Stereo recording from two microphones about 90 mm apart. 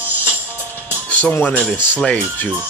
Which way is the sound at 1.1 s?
15° left (ahead or behind).